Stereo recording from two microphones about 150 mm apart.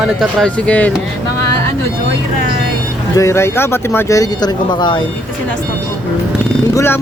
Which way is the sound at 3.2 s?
15° left (ahead or behind).